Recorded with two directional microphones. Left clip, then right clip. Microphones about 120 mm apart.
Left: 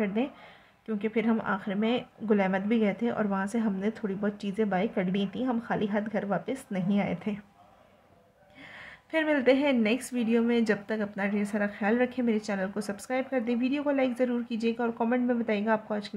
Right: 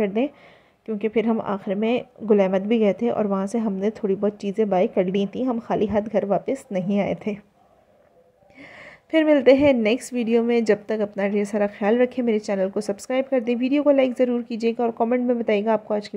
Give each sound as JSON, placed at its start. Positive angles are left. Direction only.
{"t": 0.0, "sound": "a woman's voice", "side_deg": -50}
{"t": 8.5, "sound": "a woman's voice", "side_deg": -50}